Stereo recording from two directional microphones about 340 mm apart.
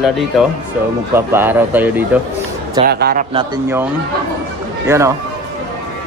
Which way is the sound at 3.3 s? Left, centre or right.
Centre.